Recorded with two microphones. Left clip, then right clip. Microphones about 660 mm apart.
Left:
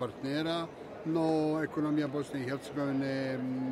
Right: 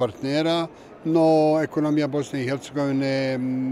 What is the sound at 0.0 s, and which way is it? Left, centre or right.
Speech, right.